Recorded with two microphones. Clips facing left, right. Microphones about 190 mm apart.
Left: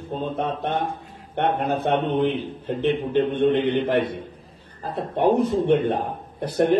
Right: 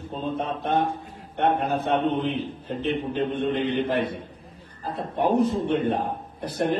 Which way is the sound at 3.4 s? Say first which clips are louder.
Left 4 dB; 65° left (ahead or behind).